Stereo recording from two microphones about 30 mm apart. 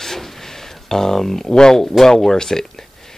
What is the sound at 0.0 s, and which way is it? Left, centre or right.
Speech, centre.